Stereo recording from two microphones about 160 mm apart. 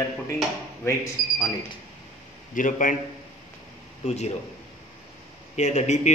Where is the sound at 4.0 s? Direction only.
45° left (ahead or behind).